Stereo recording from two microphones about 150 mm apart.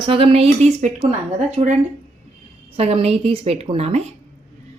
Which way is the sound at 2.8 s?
45° right (ahead or behind).